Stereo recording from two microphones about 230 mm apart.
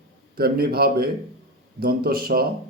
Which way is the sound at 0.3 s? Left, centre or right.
Right.